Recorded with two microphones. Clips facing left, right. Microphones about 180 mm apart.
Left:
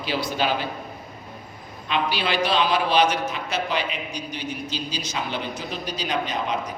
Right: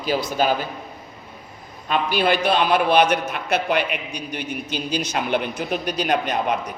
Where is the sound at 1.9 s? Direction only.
50° right (ahead or behind).